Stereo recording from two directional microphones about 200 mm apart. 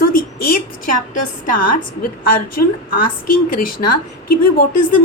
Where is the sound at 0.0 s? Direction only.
45° left (ahead or behind).